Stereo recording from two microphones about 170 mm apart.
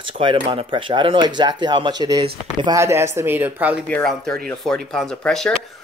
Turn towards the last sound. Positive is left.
turn(degrees=5)  # may be behind; listen again after turning